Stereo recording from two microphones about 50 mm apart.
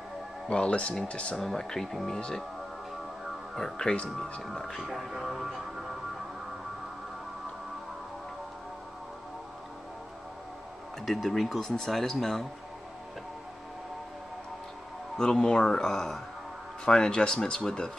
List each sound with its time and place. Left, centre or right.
0.5 s speech: left
1.3 s speech: centre
3.5 s speech: centre
4.1 s music: centre
11.1 s music: centre
15.3 s speech: centre